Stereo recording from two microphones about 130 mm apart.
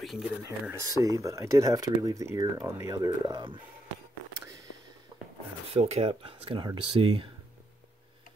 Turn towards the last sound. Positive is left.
turn(degrees=-45)  # may be behind; listen again after turning